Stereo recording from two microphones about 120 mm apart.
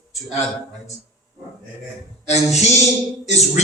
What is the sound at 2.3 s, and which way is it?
Speech, 70° left (ahead or behind).